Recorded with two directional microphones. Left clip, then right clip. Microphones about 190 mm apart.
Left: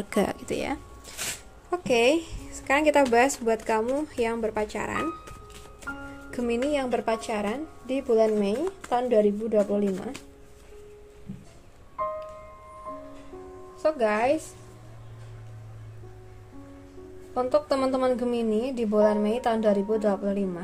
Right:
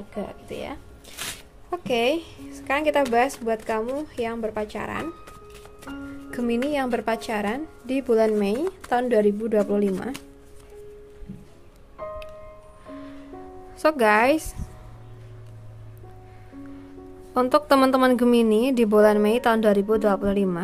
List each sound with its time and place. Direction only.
0.1 s speech: 35° left (ahead or behind)
0.5 s speech: 20° left (ahead or behind)
1.7 s speech: 5° right (ahead or behind)
6.3 s a woman's voice: 15° right (ahead or behind)
13.8 s speech: 35° right (ahead or behind)
17.3 s speech: 35° right (ahead or behind)